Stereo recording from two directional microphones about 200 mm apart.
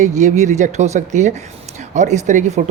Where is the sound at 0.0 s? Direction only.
35° right (ahead or behind).